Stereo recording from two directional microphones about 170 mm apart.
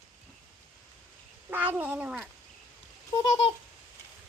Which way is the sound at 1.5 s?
10° right (ahead or behind).